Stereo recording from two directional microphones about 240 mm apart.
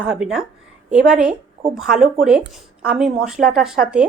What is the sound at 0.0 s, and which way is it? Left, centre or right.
Speech, centre.